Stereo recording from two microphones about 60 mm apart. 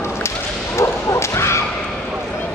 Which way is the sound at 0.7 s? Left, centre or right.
Left.